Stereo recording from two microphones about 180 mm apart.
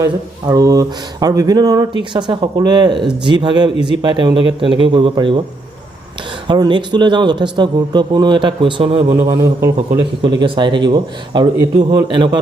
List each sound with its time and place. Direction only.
0.0 s speech: 20° right (ahead or behind)
6.5 s speech: 25° right (ahead or behind)
9.2 s speech: 20° right (ahead or behind)